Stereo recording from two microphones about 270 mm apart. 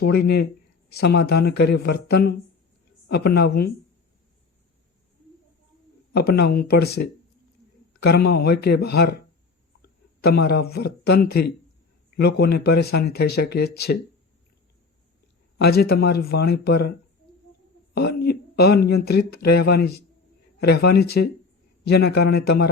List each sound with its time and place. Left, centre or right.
0.0 s speech: left
6.1 s a man's voice: left
15.5 s speech: left
17.9 s speech: left